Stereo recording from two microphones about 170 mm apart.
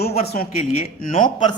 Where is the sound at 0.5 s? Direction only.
50° left (ahead or behind).